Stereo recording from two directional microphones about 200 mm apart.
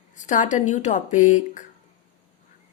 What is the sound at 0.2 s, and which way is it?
A woman's voice, 40° left (ahead or behind).